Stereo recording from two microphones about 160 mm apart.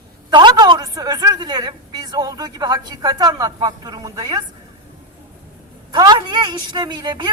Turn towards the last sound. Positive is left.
turn(degrees=-25)  # may be behind; listen again after turning